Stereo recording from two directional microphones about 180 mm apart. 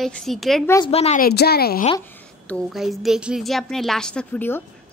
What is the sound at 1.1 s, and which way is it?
Speech, 60° left (ahead or behind).